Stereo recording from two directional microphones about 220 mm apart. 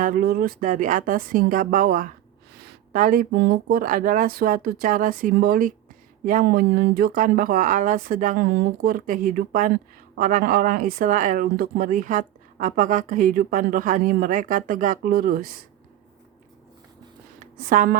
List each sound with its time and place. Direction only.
0.0 s speech: 40° right (ahead or behind)
17.7 s speech: 40° right (ahead or behind)